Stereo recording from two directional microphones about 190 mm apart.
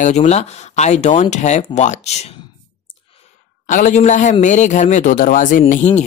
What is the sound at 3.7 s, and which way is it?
Speech, 40° left (ahead or behind).